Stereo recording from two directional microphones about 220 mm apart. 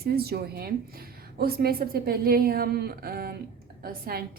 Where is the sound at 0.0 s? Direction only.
45° right (ahead or behind).